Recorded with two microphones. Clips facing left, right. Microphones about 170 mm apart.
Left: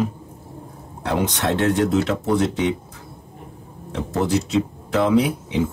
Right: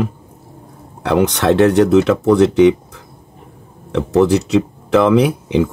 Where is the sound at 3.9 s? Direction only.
70° right (ahead or behind).